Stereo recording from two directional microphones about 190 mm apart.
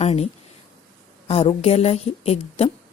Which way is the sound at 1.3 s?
30° left (ahead or behind).